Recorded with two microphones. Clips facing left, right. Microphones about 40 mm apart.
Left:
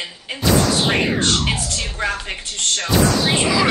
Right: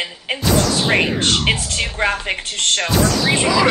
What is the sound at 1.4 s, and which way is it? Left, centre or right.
Speech, right.